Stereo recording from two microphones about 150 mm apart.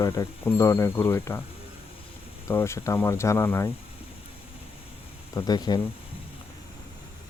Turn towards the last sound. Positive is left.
turn(degrees=25)  # may be behind; listen again after turning